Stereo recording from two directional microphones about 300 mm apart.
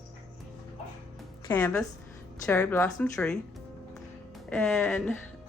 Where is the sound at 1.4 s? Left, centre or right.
Centre.